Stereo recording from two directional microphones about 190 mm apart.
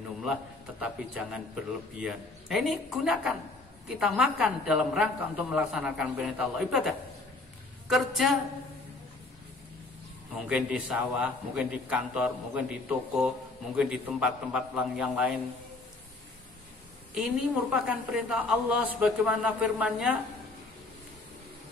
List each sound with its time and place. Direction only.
0.2 s a man's voice: 5° right (ahead or behind)
10.5 s a man's voice: 5° right (ahead or behind)
17.1 s a man's voice: 5° right (ahead or behind)